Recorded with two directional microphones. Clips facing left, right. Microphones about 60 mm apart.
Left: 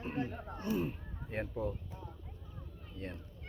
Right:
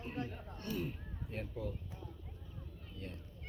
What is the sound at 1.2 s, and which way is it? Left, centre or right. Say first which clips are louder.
Speech: left 6 dB; left.